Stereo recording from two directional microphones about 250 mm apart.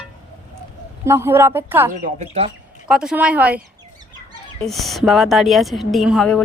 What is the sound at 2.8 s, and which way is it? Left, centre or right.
Speech, centre.